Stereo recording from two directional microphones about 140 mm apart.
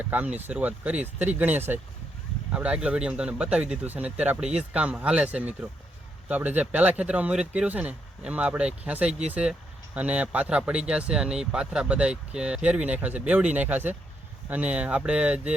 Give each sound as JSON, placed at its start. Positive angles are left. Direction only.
{"t": 0.0, "sound": "speech", "side_deg": -10}